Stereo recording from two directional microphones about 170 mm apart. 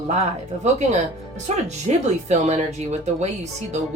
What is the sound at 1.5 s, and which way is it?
Speech, 40° right (ahead or behind).